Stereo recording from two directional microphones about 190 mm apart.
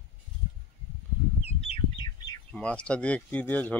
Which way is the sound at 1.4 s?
30° left (ahead or behind).